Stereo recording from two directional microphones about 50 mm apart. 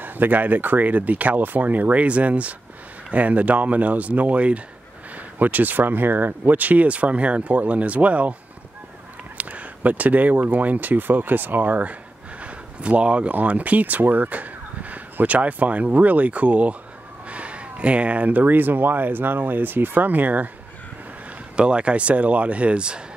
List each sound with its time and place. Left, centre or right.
0.0 s speech: right
9.4 s speech: right
21.5 s speech: right